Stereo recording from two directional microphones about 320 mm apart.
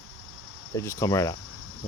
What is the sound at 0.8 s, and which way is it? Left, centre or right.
Speech, centre.